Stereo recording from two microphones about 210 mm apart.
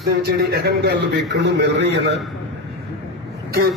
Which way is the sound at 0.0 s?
50° right (ahead or behind).